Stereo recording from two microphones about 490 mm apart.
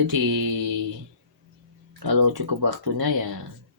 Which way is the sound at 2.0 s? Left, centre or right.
Right.